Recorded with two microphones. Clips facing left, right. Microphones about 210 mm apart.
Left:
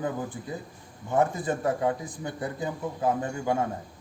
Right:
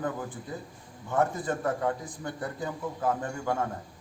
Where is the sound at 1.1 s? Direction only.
10° left (ahead or behind).